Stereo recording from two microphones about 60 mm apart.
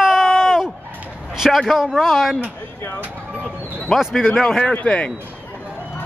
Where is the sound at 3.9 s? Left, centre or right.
Centre.